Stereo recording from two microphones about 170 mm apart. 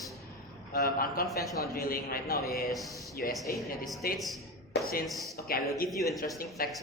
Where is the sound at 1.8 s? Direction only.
60° left (ahead or behind).